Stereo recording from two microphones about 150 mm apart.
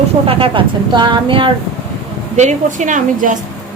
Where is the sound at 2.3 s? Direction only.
55° right (ahead or behind).